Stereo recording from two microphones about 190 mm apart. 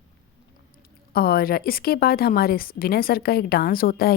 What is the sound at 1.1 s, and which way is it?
A woman's voice, 50° left (ahead or behind).